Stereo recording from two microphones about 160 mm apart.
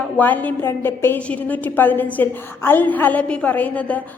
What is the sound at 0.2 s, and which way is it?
A woman's voice, 10° left (ahead or behind).